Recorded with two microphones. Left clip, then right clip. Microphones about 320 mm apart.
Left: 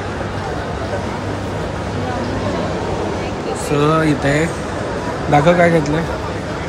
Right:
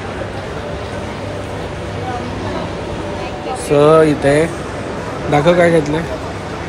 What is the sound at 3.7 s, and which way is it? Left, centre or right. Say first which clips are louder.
A man's voice: right 6 dB; centre.